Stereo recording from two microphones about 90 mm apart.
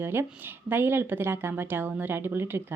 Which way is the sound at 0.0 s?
25° right (ahead or behind).